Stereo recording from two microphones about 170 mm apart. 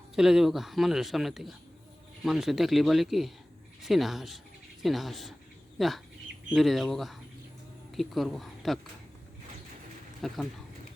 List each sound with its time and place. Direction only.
0.2 s a man's voice: centre (ahead or behind)
10.2 s speech: centre (ahead or behind)